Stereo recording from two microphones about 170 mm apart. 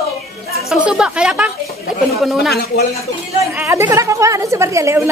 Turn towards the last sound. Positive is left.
turn(degrees=-15)  # may be behind; listen again after turning